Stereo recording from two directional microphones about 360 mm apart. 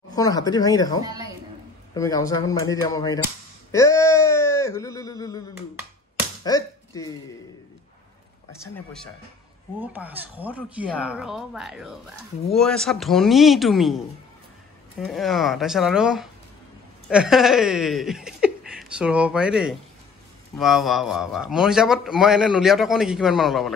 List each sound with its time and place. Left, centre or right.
0.1 s speech: centre
1.0 s a woman's voice: centre
2.0 s speech: centre
6.4 s speech: centre
8.5 s a man's voice: centre